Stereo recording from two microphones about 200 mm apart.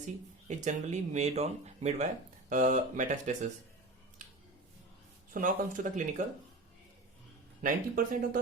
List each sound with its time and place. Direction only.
0.4 s speech: 35° right (ahead or behind)
5.3 s speech: 40° right (ahead or behind)
7.6 s speech: 45° right (ahead or behind)